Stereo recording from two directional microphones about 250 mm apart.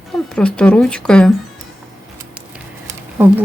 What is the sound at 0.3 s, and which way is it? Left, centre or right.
Speech, centre.